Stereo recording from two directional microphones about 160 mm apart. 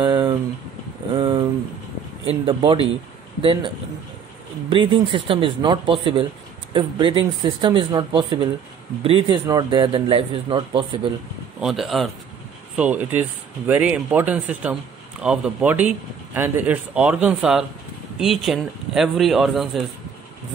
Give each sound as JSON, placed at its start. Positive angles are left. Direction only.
{"t": 0.0, "sound": "a sound", "side_deg": -25}
{"t": 2.2, "sound": "speech", "side_deg": -35}
{"t": 4.6, "sound": "speech", "side_deg": -30}
{"t": 11.6, "sound": "speech", "side_deg": 0}